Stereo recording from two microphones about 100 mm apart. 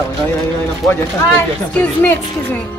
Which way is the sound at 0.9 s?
20° left (ahead or behind).